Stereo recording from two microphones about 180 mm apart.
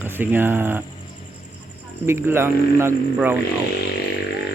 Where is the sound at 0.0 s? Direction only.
10° right (ahead or behind).